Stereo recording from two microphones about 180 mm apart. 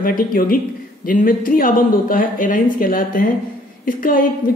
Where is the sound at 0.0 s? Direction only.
50° left (ahead or behind).